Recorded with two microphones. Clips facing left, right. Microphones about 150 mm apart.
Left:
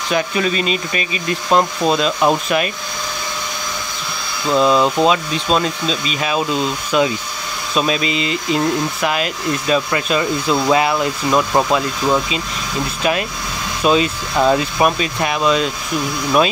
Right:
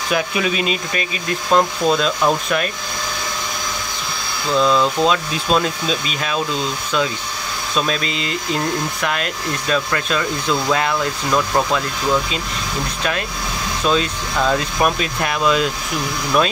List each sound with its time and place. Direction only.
0.1 s speech: 5° right (ahead or behind)
4.6 s speech: 10° left (ahead or behind)
13.8 s speech: 10° left (ahead or behind)